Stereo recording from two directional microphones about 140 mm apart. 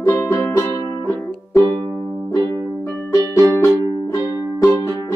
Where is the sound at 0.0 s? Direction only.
20° left (ahead or behind).